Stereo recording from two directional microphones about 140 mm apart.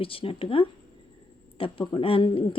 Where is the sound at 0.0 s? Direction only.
40° left (ahead or behind).